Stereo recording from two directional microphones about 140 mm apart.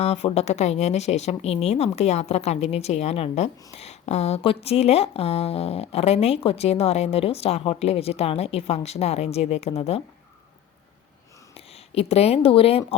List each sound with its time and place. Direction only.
0.0 s a woman's voice: 45° left (ahead or behind)
11.5 s speech: 45° left (ahead or behind)